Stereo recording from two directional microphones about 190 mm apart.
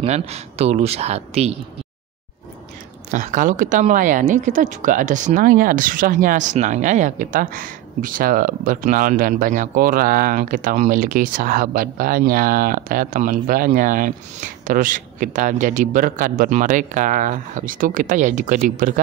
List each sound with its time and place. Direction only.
0.0 s speech: 35° right (ahead or behind)
3.1 s speech: 40° right (ahead or behind)